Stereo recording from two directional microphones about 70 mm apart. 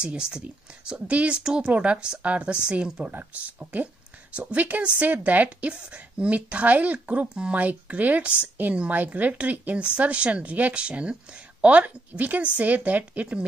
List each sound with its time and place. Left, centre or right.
0.0 s a woman's voice: centre